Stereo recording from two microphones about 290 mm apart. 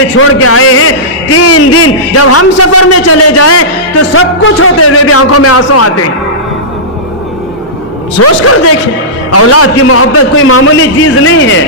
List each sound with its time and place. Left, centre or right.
0.2 s a man's voice: left
8.2 s a man's voice: left